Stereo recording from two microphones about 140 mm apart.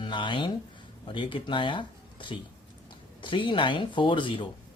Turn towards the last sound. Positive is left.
turn(degrees=35)  # may be behind; listen again after turning